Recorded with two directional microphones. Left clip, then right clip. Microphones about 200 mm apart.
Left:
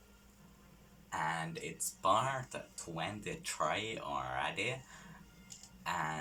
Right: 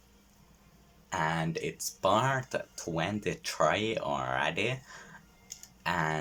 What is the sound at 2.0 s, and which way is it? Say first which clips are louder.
Speech: right 5 dB; 45° right (ahead or behind).